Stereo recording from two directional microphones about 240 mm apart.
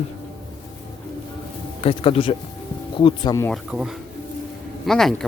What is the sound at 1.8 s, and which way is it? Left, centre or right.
Speech, left.